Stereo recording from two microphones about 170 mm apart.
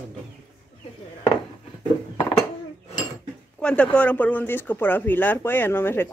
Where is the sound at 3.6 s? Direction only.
5° left (ahead or behind).